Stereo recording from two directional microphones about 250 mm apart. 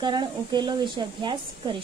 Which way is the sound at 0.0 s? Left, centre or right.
Centre.